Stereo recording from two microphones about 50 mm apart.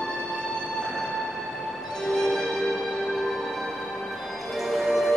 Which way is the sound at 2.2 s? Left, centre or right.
Centre.